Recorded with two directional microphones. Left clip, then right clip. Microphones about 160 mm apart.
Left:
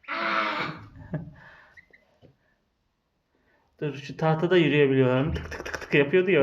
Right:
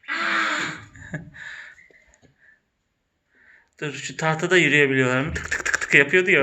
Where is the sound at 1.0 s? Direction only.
15° left (ahead or behind).